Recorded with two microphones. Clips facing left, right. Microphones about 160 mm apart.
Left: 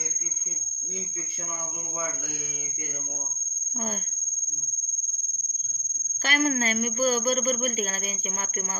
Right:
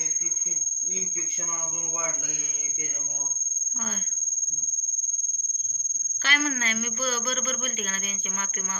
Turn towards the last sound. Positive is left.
turn(degrees=40)  # may be behind; listen again after turning